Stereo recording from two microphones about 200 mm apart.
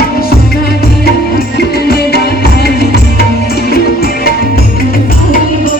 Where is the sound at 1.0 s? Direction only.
50° left (ahead or behind).